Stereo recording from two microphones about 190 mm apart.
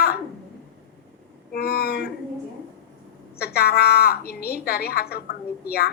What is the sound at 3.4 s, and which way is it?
A woman's voice, 55° left (ahead or behind).